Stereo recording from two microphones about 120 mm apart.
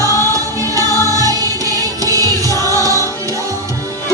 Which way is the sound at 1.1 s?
30° right (ahead or behind).